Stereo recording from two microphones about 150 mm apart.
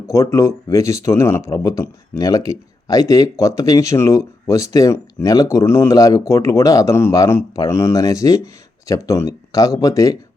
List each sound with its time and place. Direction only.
0.1 s speech: 20° left (ahead or behind)